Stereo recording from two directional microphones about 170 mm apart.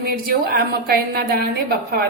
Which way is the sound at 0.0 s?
60° right (ahead or behind).